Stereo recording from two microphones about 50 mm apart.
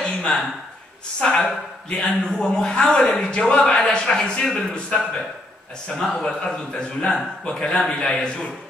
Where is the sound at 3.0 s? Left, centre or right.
Left.